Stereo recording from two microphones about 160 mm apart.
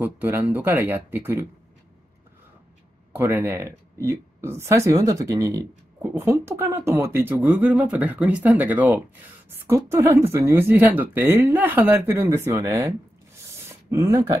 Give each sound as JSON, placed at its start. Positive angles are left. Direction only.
{"t": 0.0, "sound": "speech", "side_deg": -10}
{"t": 3.2, "sound": "speech", "side_deg": -15}
{"t": 13.7, "sound": "a sound", "side_deg": -20}